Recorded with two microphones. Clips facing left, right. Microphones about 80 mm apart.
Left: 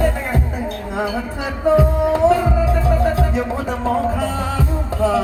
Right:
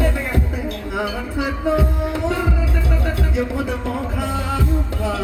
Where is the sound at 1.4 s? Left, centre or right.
Left.